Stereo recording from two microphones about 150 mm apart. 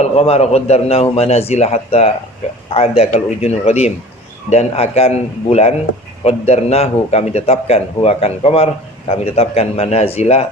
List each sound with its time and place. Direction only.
0.0 s a man's voice: 45° left (ahead or behind)